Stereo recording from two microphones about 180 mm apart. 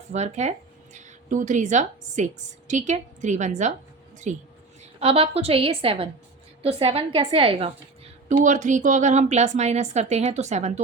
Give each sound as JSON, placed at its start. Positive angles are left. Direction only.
{"t": 0.1, "sound": "a woman's voice", "side_deg": -40}
{"t": 8.3, "sound": "a woman's voice", "side_deg": -45}